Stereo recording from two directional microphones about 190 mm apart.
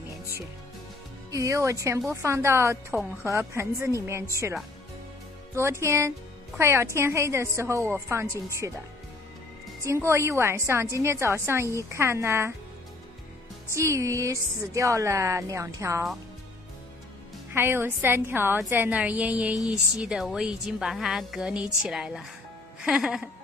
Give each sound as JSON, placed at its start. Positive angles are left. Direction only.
{"t": 1.3, "sound": "a woman's voice", "side_deg": -15}
{"t": 9.8, "sound": "a woman's voice", "side_deg": -15}
{"t": 13.7, "sound": "a woman's voice", "side_deg": -15}
{"t": 17.5, "sound": "a woman's voice", "side_deg": -10}